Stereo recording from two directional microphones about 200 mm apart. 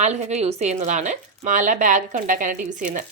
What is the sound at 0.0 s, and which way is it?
Speech, 35° right (ahead or behind).